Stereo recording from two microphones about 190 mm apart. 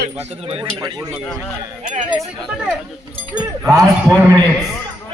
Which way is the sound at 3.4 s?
15° right (ahead or behind).